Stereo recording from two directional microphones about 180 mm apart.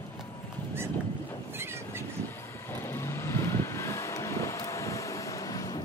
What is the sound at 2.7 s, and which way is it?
Vehicle, 15° left (ahead or behind).